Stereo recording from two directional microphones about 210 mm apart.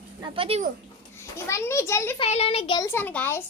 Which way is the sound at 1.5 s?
15° left (ahead or behind).